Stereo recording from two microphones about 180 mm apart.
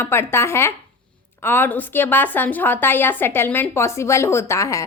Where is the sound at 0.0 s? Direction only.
15° left (ahead or behind).